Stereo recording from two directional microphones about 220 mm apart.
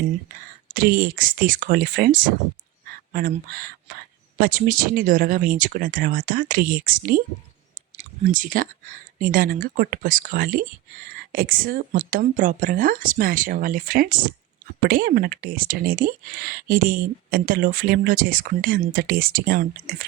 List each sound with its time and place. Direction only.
0.7 s speech: 40° right (ahead or behind)